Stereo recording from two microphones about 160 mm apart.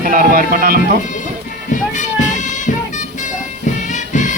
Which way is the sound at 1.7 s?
50° left (ahead or behind).